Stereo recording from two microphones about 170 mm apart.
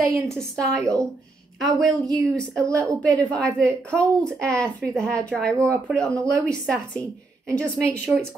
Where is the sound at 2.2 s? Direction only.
5° left (ahead or behind).